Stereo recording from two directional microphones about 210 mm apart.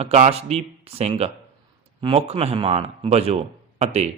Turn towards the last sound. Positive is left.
turn(degrees=-30)  # may be behind; listen again after turning